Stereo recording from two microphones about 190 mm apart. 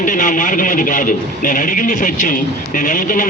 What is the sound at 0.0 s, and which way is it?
Speech, 45° left (ahead or behind).